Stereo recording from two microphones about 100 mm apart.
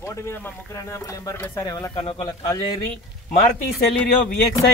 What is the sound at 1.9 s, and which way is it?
Speech, 65° left (ahead or behind).